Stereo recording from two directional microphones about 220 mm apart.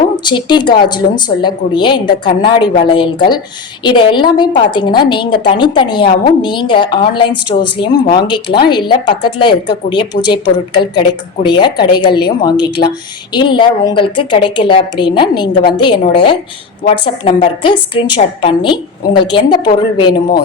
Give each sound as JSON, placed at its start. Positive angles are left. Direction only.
{"t": 0.3, "sound": "a woman's voice", "side_deg": 20}